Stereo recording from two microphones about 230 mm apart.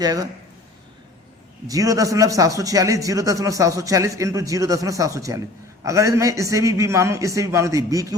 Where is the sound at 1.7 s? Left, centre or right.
Centre.